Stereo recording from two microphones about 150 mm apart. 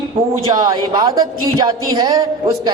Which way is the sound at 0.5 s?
25° right (ahead or behind).